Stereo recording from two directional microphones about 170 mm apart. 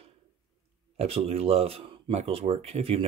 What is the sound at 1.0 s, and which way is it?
Speech, 35° right (ahead or behind).